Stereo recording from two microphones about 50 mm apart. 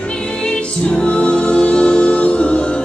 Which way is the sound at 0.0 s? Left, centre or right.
Centre.